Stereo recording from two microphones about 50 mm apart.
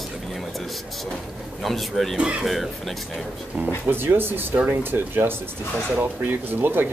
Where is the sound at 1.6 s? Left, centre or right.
Centre.